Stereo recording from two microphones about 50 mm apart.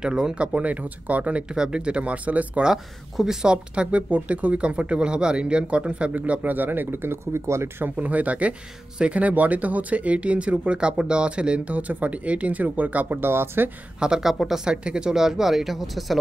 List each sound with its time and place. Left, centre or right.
0.0 s speech: centre
1.5 s speech: centre
2.6 s speech: centre
3.7 s speech: right
7.9 s speech: right
13.2 s speech: right
13.9 s speech: centre